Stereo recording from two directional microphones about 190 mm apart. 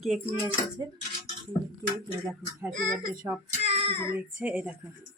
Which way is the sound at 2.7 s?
40° right (ahead or behind).